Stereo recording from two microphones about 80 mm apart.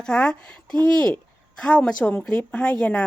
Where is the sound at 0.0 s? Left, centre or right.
Centre.